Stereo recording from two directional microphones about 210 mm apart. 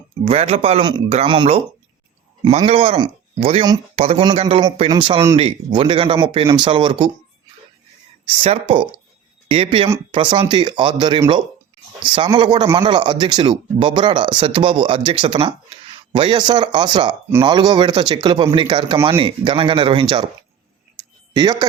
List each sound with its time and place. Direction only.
0.3 s speech: 30° right (ahead or behind)
8.4 s speech: 25° right (ahead or behind)
21.3 s speech: 20° right (ahead or behind)